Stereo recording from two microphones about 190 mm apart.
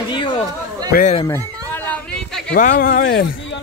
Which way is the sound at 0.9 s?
45° left (ahead or behind).